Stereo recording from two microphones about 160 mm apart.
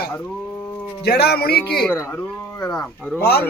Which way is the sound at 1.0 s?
85° left.